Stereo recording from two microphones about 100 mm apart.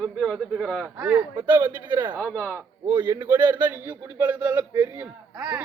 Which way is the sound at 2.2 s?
15° left (ahead or behind).